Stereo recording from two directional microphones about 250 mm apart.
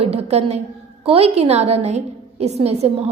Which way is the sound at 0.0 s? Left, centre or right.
Right.